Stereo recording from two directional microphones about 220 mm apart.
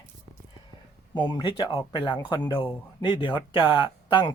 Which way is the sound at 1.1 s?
20° left (ahead or behind).